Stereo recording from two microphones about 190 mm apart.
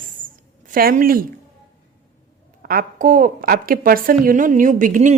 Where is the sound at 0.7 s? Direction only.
50° right (ahead or behind).